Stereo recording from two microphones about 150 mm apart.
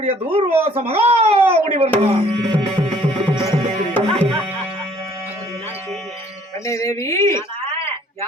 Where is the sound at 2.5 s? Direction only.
10° left (ahead or behind).